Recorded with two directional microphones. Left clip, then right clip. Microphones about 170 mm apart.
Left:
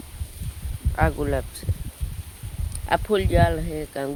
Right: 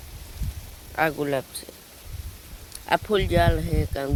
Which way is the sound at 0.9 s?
15° right (ahead or behind).